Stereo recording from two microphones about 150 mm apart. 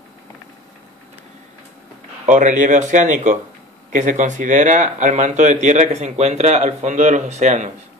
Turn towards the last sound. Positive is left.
turn(degrees=-50)  # may be behind; listen again after turning